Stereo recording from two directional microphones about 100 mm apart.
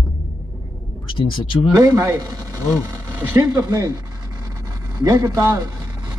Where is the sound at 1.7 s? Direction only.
40° right (ahead or behind).